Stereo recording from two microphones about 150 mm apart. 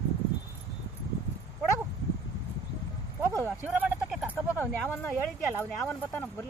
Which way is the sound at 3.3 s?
15° right (ahead or behind).